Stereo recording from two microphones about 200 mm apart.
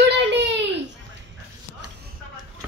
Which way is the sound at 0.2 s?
60° right (ahead or behind).